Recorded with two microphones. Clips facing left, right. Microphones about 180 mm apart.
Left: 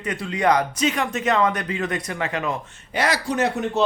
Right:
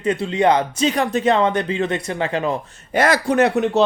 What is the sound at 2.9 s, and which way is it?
Speech, 50° right (ahead or behind).